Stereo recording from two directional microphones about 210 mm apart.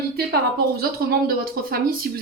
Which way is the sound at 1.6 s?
45° right (ahead or behind).